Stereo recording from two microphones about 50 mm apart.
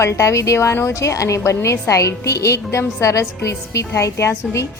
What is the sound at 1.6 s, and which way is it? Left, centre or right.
A woman's voice, left.